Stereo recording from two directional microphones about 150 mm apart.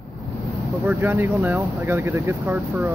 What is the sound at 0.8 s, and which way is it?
Speech, 15° right (ahead or behind).